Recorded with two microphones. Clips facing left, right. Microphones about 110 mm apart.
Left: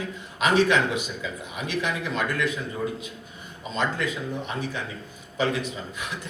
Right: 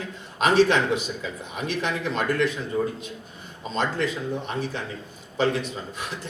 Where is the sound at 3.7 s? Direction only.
35° right (ahead or behind).